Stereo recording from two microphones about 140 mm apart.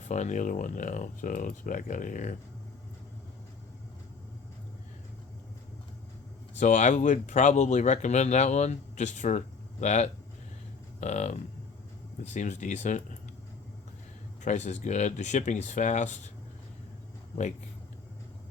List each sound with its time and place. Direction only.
0.1 s speech: 60° left (ahead or behind)
6.6 s speech: 55° left (ahead or behind)
14.4 s speech: 55° left (ahead or behind)